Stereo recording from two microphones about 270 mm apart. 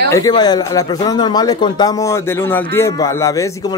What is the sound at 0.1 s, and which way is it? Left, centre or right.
Speech, centre.